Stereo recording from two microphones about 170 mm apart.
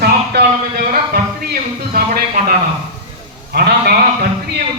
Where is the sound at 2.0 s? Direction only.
60° right (ahead or behind).